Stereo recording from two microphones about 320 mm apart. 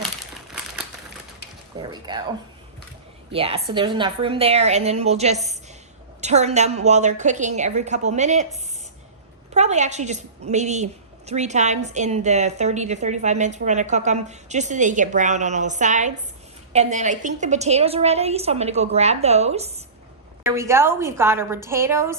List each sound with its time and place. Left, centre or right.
1.8 s a woman's voice: centre
3.3 s a woman's voice: centre
20.4 s a woman's voice: centre